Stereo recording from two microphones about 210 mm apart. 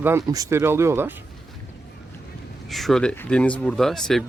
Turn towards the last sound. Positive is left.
turn(degrees=0)  # may be behind; listen again after turning